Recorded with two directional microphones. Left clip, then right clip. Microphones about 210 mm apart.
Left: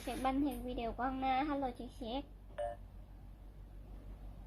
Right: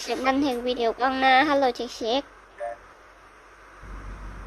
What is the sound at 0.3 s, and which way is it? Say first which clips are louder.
A woman's voice: right 13 dB; 50° right (ahead or behind).